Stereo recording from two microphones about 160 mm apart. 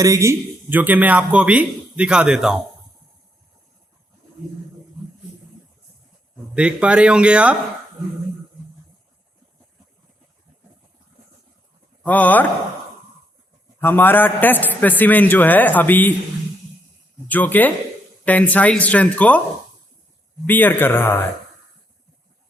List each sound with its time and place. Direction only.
0.0 s a man's voice: 20° right (ahead or behind)
6.5 s a man's voice: 5° right (ahead or behind)
12.0 s a man's voice: 10° left (ahead or behind)
13.7 s a man's voice: 10° left (ahead or behind)
17.2 s a man's voice: 10° left (ahead or behind)
20.5 s a man's voice: 10° left (ahead or behind)